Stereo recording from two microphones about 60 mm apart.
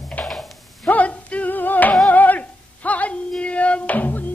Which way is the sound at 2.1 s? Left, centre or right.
Left.